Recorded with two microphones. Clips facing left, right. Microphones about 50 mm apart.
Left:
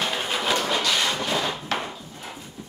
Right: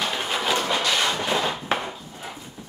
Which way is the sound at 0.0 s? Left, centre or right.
Centre.